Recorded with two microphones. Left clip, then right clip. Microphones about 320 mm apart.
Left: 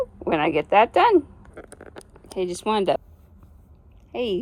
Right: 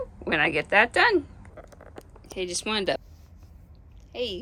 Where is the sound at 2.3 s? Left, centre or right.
Centre.